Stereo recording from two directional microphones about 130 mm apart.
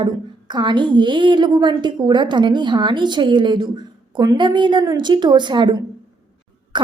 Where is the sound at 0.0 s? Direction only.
35° right (ahead or behind).